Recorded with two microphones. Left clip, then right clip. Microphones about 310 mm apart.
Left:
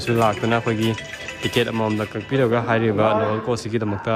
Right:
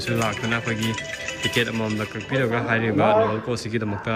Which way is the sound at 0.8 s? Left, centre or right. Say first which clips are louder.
Left 2 dB; right.